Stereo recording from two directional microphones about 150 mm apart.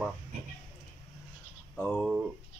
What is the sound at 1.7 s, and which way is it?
Speech, centre (ahead or behind).